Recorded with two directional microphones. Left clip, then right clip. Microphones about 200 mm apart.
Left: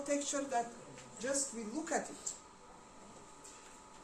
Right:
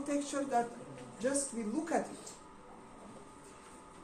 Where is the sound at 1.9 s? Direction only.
25° left (ahead or behind).